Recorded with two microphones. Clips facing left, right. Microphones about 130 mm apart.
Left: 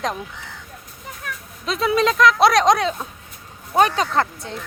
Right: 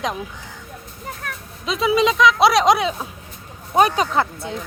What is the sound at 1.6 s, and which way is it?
Speech, centre (ahead or behind).